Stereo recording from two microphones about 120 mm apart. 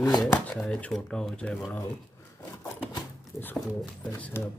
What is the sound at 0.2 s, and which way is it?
Speech, 5° left (ahead or behind).